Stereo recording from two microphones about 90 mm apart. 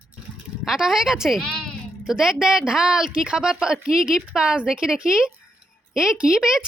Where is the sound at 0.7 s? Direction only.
5° right (ahead or behind).